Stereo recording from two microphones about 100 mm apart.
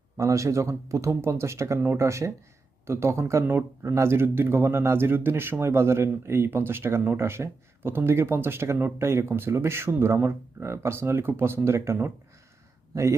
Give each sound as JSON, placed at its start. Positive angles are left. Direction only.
{"t": 0.2, "sound": "speech", "side_deg": -30}